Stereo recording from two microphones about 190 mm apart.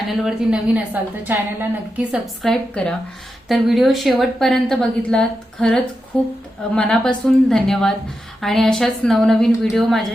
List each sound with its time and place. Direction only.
0.1 s a woman's voice: 5° right (ahead or behind)
2.4 s a woman's voice: 5° left (ahead or behind)